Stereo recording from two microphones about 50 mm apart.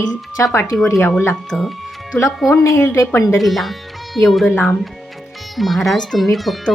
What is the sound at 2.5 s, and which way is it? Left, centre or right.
Speech, left.